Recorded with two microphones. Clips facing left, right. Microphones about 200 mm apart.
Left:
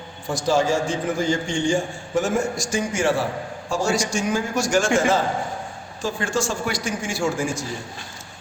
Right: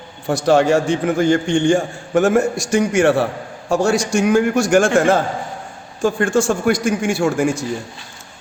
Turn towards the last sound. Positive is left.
turn(degrees=-60)  # may be behind; listen again after turning